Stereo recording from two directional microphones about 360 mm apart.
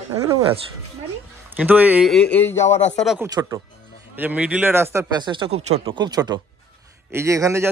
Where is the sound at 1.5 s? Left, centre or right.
Centre.